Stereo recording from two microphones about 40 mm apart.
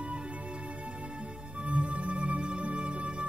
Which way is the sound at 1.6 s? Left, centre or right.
Right.